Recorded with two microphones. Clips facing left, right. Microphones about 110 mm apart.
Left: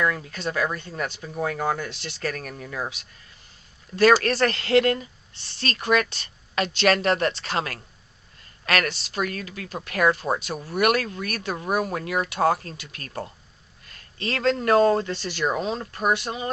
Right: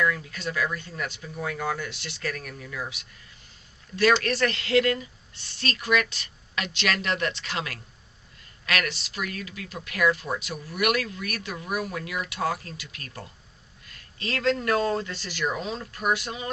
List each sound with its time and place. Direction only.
0.0 s speech: 40° left (ahead or behind)